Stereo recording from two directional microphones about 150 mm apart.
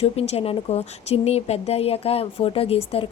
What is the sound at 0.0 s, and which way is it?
A woman's voice, 40° left (ahead or behind).